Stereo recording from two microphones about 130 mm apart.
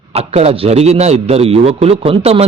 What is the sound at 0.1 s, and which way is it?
A man's voice, 50° right (ahead or behind).